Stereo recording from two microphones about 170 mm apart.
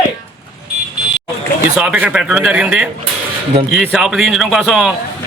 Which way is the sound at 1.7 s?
5° right (ahead or behind).